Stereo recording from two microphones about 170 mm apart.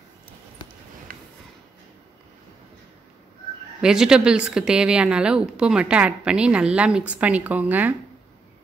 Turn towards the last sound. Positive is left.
turn(degrees=-10)  # may be behind; listen again after turning